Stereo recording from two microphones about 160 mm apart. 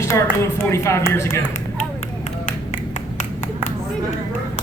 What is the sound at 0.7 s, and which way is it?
Speech, 15° left (ahead or behind).